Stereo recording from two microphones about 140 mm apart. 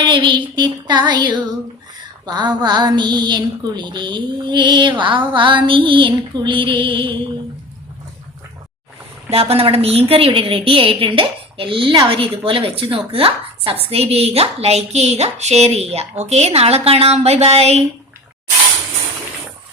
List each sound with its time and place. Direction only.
0.0 s a woman's voice: 35° right (ahead or behind)
9.3 s a woman's voice: 45° right (ahead or behind)